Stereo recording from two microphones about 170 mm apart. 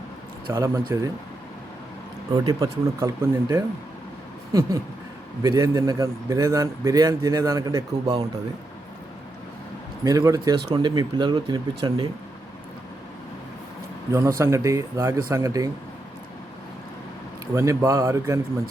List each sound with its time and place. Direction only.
0.5 s speech: 15° right (ahead or behind)
2.3 s speech: 25° right (ahead or behind)
5.4 s speech: 20° right (ahead or behind)
10.0 s speech: 20° right (ahead or behind)
14.1 s speech: 15° right (ahead or behind)
17.5 s speech: 15° right (ahead or behind)